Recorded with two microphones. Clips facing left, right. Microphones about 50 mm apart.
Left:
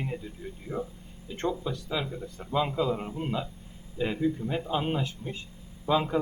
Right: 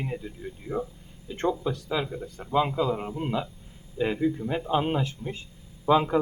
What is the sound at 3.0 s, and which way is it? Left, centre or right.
A man's voice, right.